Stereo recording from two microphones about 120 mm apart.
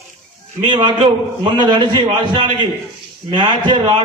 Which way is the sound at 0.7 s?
40° right (ahead or behind).